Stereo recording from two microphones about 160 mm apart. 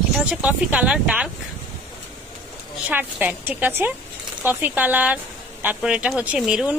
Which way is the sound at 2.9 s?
10° right (ahead or behind).